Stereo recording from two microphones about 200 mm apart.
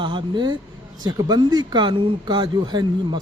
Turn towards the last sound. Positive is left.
turn(degrees=-20)  # may be behind; listen again after turning